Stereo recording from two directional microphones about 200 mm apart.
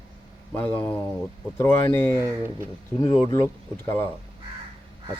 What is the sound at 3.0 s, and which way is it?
Speech, 25° left (ahead or behind).